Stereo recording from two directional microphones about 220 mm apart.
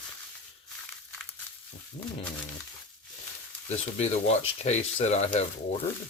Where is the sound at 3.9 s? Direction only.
30° left (ahead or behind).